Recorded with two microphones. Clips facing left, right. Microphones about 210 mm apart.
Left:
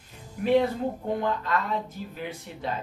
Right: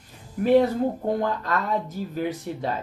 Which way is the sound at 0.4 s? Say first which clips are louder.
Right 4 dB; 40° right (ahead or behind).